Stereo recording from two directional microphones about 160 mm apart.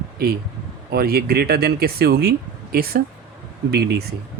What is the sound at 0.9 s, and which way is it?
Speech, 75° right (ahead or behind).